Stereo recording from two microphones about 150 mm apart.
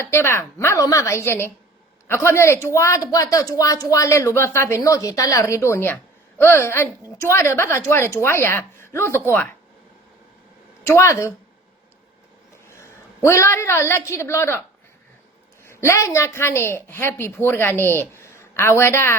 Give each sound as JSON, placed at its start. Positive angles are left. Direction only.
{"t": 0.0, "sound": "a woman's voice", "side_deg": 15}
{"t": 10.8, "sound": "speech", "side_deg": 20}
{"t": 12.6, "sound": "a woman's voice", "side_deg": 20}
{"t": 15.6, "sound": "a woman's voice", "side_deg": 15}